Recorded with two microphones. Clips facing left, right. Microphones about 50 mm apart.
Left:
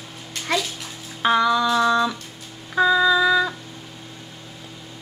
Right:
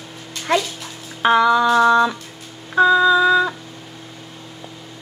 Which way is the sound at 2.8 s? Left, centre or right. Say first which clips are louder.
Right 4 dB; centre.